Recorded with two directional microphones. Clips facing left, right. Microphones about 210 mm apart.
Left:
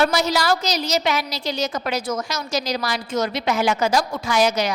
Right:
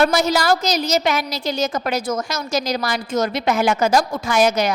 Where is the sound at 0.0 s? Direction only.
50° right (ahead or behind).